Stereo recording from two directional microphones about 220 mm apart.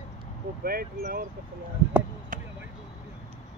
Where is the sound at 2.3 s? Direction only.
35° right (ahead or behind).